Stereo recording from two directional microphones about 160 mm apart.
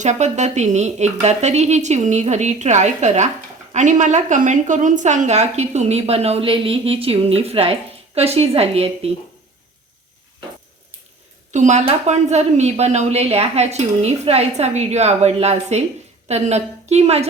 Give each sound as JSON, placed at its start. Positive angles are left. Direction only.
{"t": 0.0, "sound": "a woman's voice", "side_deg": -45}
{"t": 11.5, "sound": "a woman's voice", "side_deg": -50}